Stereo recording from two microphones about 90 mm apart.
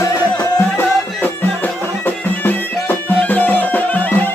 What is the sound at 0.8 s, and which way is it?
Music, 20° left (ahead or behind).